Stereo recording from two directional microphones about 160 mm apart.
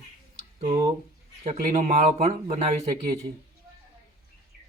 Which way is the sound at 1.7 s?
45° right (ahead or behind).